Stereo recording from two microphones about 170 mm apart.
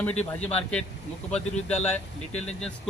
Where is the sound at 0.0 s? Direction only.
10° left (ahead or behind).